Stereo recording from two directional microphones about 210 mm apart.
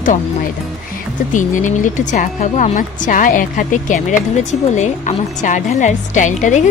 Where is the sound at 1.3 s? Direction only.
35° left (ahead or behind).